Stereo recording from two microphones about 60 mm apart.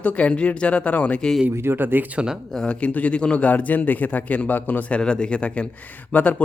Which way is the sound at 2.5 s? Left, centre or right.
Centre.